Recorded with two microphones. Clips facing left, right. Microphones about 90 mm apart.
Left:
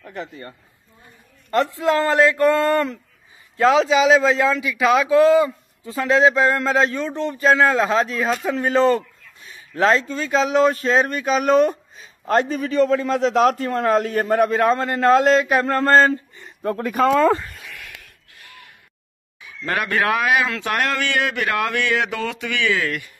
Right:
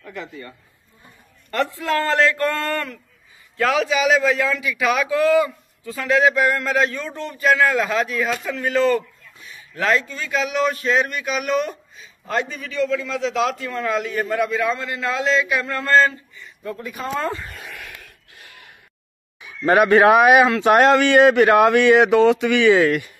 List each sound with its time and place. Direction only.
0.0 s a man's voice: 40° left (ahead or behind)
1.8 s a man's voice: 20° left (ahead or behind); by 16.5 s 40° left (ahead or behind)
16.6 s speech: 65° left (ahead or behind); by 17.4 s 80° left
17.5 s a sound: 50° right (ahead or behind)
19.4 s speech: 20° right (ahead or behind)